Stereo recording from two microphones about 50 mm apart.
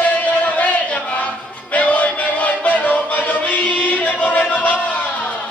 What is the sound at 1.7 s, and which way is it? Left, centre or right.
Music, left.